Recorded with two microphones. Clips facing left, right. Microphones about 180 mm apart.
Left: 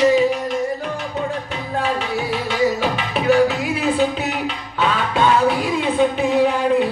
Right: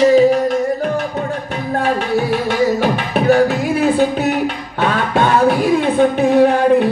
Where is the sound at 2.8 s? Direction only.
50° right (ahead or behind).